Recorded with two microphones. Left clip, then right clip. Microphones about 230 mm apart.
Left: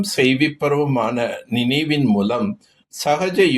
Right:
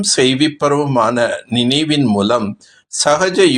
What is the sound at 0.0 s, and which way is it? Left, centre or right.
Speech, right.